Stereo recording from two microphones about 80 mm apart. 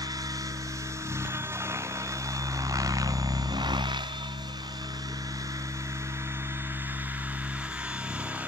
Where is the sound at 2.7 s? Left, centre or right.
Right.